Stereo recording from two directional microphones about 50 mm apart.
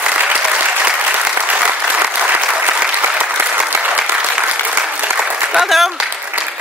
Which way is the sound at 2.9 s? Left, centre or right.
Right.